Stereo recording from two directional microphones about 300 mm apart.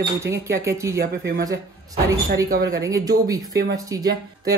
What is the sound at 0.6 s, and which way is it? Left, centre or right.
Speech, centre.